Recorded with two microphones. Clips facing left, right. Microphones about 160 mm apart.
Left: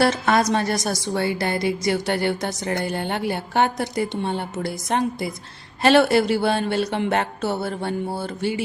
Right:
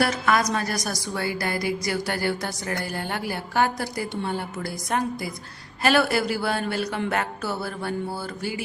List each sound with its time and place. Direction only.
0.0 s a woman's voice: 30° left (ahead or behind)